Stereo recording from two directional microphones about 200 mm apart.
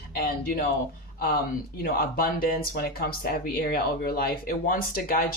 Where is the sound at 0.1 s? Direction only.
50° left (ahead or behind).